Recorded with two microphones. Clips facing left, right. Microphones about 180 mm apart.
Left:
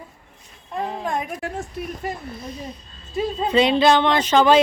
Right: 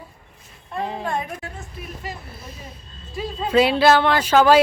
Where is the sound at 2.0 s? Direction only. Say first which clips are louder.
Left 5 dB; 55° left (ahead or behind).